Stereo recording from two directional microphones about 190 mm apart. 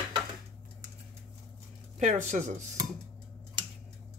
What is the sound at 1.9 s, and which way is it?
Speech, 40° right (ahead or behind).